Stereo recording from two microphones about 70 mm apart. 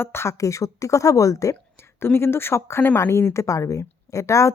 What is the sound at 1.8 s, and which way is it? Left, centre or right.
A woman's voice, left.